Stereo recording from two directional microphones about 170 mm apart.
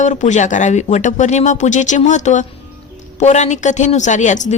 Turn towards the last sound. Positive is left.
turn(degrees=45)  # may be behind; listen again after turning